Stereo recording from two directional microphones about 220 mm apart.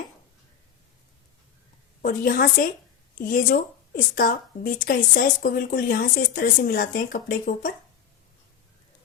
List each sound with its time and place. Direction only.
2.0 s a woman's voice: 40° left (ahead or behind)